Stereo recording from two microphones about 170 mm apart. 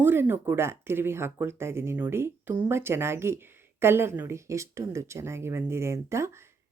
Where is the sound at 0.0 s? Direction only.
15° right (ahead or behind).